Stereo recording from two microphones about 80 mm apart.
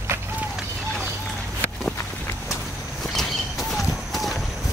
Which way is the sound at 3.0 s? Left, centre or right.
Centre.